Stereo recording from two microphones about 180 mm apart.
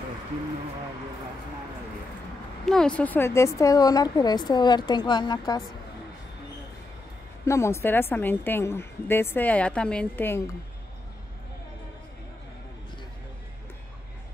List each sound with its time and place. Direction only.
2.6 s a woman's voice: 5° left (ahead or behind); by 5.4 s 25° left (ahead or behind)
7.4 s a woman's voice: 15° left (ahead or behind)